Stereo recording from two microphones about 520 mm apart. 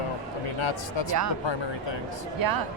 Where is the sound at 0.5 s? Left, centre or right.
Left.